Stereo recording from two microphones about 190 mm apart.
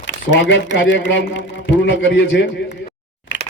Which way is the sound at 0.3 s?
70° left (ahead or behind).